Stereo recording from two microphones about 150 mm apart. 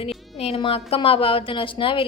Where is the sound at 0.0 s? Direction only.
40° left (ahead or behind).